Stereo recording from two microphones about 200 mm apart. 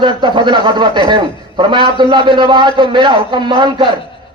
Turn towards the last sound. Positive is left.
turn(degrees=-20)  # may be behind; listen again after turning